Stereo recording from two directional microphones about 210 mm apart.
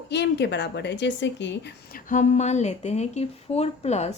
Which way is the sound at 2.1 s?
35° left (ahead or behind).